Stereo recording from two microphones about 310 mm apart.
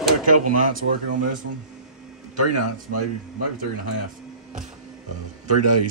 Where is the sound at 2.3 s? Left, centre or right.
Right.